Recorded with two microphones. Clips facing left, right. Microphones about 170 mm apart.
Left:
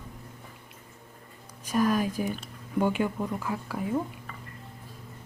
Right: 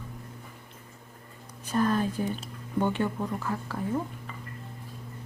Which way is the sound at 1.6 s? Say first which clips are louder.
Left 1 dB; 10° left (ahead or behind).